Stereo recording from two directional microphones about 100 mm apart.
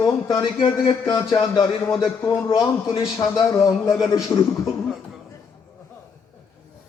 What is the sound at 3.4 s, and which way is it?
Speech, 35° left (ahead or behind).